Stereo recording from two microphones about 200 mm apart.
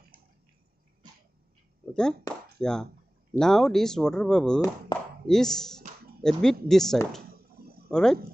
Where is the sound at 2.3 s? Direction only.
20° left (ahead or behind).